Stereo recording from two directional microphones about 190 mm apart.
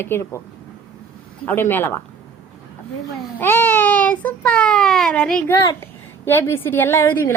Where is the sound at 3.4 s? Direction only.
10° left (ahead or behind).